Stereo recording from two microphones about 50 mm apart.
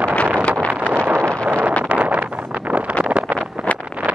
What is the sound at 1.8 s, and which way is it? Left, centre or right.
Wind noise, right.